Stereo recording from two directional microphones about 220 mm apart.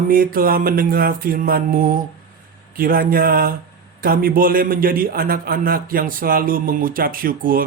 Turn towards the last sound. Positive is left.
turn(degrees=-40)  # may be behind; listen again after turning